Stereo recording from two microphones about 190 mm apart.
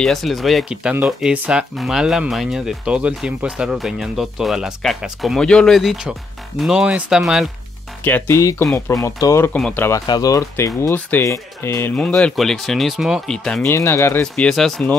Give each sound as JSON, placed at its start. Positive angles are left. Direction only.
{"t": 0.0, "sound": "speech", "side_deg": 0}
{"t": 8.0, "sound": "speech", "side_deg": 10}